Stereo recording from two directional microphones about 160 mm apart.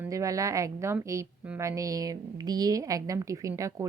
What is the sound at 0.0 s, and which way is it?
A woman's voice, 20° right (ahead or behind).